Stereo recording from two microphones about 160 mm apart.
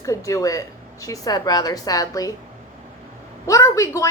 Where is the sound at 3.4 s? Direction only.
20° left (ahead or behind).